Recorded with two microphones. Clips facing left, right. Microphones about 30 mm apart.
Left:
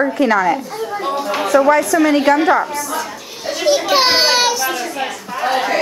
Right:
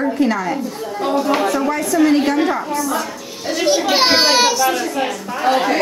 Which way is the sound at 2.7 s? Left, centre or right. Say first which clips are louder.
Right 2 dB; centre.